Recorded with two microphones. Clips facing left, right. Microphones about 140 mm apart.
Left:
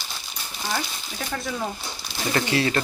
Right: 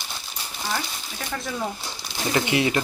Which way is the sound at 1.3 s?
Centre (ahead or behind).